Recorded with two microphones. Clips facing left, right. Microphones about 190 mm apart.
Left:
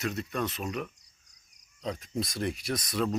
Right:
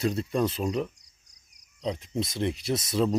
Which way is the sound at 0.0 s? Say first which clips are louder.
Right 6 dB; 30° right (ahead or behind).